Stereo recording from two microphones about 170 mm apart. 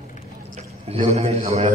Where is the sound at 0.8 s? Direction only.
35° right (ahead or behind).